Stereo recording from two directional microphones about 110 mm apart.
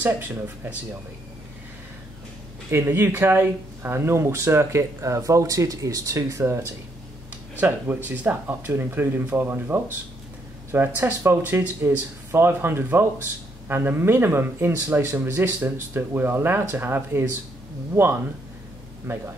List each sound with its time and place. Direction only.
0.0 s speech: 15° right (ahead or behind)
2.7 s speech: 20° right (ahead or behind)